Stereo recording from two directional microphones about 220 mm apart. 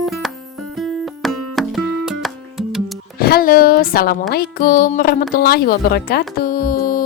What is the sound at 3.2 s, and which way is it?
A woman's voice, 45° left (ahead or behind).